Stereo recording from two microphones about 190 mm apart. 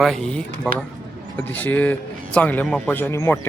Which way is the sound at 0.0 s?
Centre (ahead or behind).